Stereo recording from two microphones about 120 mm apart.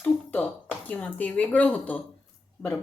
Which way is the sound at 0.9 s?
15° left (ahead or behind).